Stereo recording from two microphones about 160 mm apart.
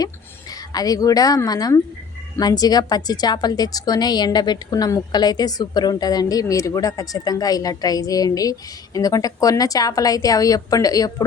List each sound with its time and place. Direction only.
0.7 s a woman's voice: 25° left (ahead or behind)